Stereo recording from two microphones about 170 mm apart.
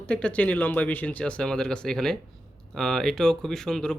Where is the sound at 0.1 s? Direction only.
5° left (ahead or behind).